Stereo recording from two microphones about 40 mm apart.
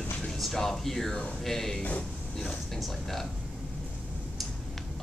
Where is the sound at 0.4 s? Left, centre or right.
Centre.